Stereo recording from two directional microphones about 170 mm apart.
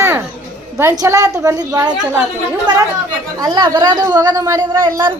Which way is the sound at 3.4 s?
25° right (ahead or behind).